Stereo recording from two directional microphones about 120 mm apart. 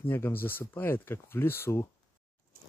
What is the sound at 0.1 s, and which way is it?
Speech, 20° left (ahead or behind).